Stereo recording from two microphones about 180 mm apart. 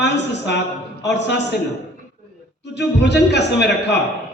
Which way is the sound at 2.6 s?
70° left (ahead or behind).